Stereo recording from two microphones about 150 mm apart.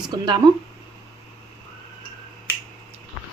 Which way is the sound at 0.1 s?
30° right (ahead or behind).